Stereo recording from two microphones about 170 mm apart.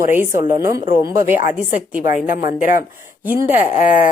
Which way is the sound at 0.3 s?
15° right (ahead or behind).